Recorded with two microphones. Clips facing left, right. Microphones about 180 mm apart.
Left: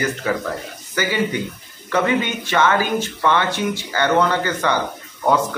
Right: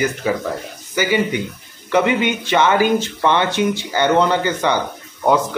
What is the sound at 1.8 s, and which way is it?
Speech, 15° right (ahead or behind).